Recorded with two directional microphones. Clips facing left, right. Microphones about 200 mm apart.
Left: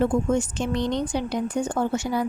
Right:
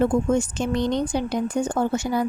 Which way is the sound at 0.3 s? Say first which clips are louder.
Right 2 dB; 45° right (ahead or behind).